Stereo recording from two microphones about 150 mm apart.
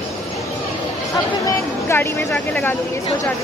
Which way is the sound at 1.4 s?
20° left (ahead or behind).